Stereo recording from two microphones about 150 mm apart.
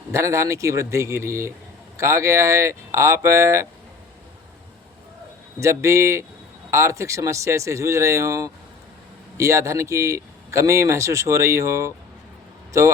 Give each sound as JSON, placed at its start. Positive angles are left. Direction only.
{"t": 0.1, "sound": "speech", "side_deg": -20}
{"t": 5.5, "sound": "speech", "side_deg": -20}